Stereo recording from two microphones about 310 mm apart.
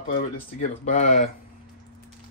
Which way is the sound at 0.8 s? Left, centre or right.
Left.